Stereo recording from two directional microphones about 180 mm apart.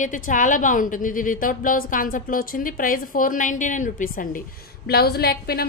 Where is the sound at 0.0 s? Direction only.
45° left (ahead or behind).